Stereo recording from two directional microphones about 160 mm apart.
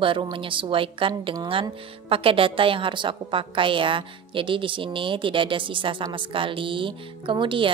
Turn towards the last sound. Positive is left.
turn(degrees=-30)  # may be behind; listen again after turning